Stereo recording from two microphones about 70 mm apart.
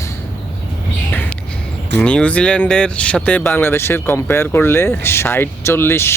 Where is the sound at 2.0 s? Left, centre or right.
Centre.